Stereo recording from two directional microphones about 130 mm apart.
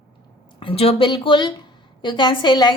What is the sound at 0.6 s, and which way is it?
A woman's voice, 45° left (ahead or behind).